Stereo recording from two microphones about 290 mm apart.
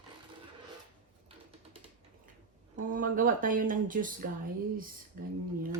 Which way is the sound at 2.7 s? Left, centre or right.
Right.